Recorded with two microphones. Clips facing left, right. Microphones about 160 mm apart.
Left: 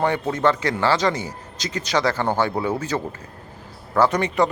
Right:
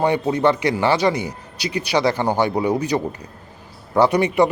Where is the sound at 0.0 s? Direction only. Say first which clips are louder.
Right 3 dB; 15° right (ahead or behind).